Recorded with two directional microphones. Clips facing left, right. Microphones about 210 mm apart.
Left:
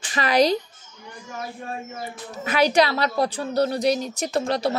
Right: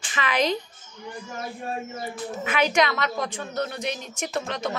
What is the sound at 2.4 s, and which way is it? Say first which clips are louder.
A woman's voice: left 4 dB; 35° left (ahead or behind).